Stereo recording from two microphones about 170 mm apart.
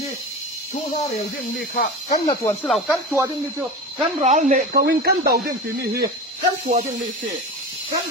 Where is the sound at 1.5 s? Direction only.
90° left.